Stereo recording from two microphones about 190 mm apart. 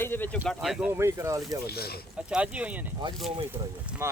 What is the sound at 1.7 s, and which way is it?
Speech, 55° left (ahead or behind).